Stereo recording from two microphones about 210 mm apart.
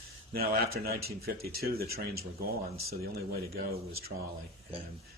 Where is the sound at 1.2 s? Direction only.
45° right (ahead or behind).